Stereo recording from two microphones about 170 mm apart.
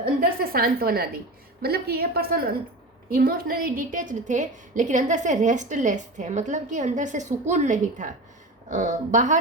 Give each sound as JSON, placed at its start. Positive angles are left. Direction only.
{"t": 0.0, "sound": "a woman's voice", "side_deg": -60}